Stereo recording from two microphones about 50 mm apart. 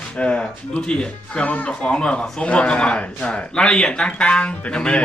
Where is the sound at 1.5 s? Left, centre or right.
Left.